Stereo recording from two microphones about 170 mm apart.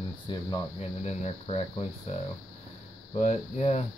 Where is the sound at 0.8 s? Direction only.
40° left (ahead or behind).